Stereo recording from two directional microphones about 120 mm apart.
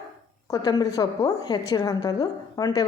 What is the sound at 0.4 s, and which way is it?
A woman's voice, 30° left (ahead or behind).